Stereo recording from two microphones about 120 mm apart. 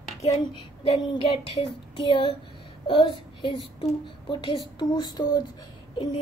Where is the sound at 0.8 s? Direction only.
60° left (ahead or behind).